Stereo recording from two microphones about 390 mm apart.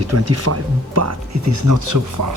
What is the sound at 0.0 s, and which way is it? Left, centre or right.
Speech, right.